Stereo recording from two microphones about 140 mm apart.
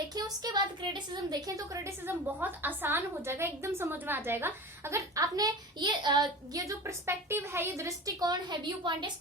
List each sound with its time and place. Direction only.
0.1 s a woman's voice: 30° right (ahead or behind)